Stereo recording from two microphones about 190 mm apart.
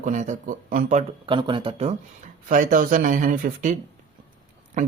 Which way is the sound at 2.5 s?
45° right (ahead or behind).